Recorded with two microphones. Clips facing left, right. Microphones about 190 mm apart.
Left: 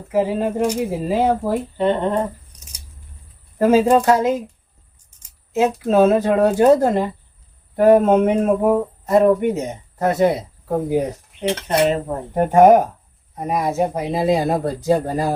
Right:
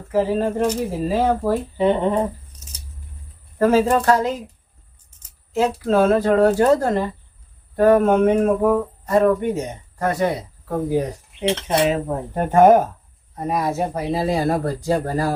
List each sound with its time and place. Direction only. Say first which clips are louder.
0.1 s speech: even; 15° left (ahead or behind)
1.8 s speech: right 1 dB; 5° right (ahead or behind)
3.6 s speech: left 2 dB; 15° left (ahead or behind)
5.5 s speech: left 2 dB; 20° left (ahead or behind)
11.9 s speech: left 1 dB; centre (ahead or behind)
12.3 s speech: left 2 dB; 15° left (ahead or behind)